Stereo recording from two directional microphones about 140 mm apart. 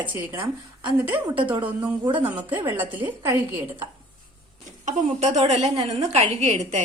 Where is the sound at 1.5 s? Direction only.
10° right (ahead or behind).